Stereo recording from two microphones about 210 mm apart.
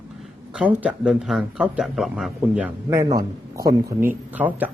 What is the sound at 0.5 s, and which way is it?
A man's voice, 5° right (ahead or behind).